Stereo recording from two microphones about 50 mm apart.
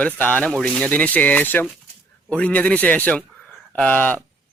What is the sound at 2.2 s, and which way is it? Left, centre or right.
Speech, left.